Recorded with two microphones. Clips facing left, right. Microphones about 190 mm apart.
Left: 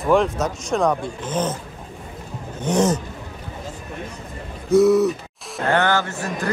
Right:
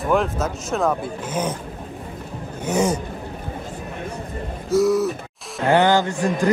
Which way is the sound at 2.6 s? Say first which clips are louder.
Left 1 dB; 10° right (ahead or behind).